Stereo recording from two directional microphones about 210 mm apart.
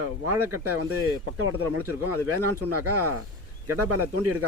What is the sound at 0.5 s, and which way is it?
Speech, 90° right.